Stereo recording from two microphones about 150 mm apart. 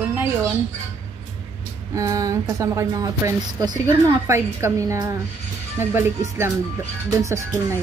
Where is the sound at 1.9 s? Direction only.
20° right (ahead or behind).